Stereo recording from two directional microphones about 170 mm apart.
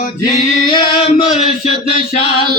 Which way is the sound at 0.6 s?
30° left (ahead or behind).